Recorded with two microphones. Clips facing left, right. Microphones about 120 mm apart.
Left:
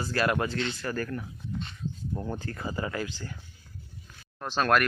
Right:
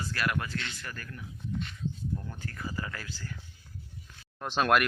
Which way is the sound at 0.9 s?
45° left (ahead or behind).